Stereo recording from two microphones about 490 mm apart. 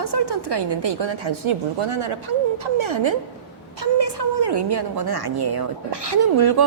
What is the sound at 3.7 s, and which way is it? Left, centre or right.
A woman's voice, right.